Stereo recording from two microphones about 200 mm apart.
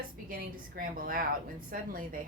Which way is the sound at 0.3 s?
45° right (ahead or behind).